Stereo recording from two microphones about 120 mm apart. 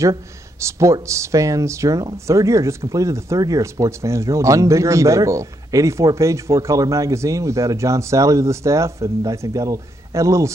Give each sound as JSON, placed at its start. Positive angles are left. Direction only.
{"t": 0.0, "sound": "speech", "side_deg": -25}